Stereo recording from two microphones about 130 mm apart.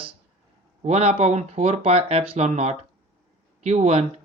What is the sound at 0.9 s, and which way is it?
Speech, 55° right (ahead or behind).